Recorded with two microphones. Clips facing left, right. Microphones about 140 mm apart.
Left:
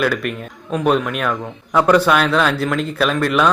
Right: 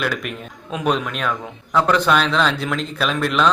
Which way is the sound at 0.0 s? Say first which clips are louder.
Left 5 dB; centre (ahead or behind).